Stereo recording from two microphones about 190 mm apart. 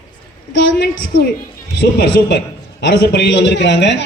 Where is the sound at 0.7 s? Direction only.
60° left (ahead or behind).